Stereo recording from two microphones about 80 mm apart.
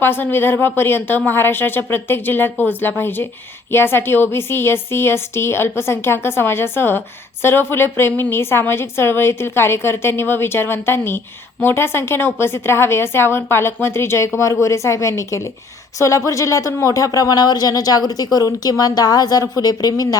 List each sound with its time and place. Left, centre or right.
0.0 s a woman's voice: left